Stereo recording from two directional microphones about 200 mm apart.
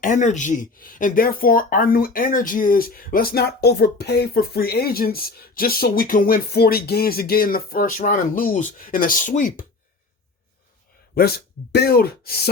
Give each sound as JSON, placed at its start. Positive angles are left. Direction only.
{"t": 0.0, "sound": "speech", "side_deg": 40}
{"t": 11.1, "sound": "speech", "side_deg": 50}